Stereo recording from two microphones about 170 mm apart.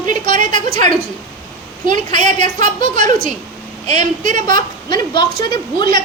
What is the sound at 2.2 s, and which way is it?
A woman's voice, 45° right (ahead or behind).